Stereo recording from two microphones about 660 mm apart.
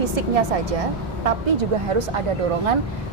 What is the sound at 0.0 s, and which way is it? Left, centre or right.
A woman's voice, right.